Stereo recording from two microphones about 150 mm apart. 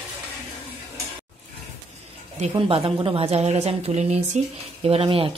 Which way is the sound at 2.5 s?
35° right (ahead or behind).